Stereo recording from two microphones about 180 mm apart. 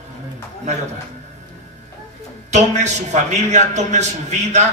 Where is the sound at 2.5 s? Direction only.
40° right (ahead or behind).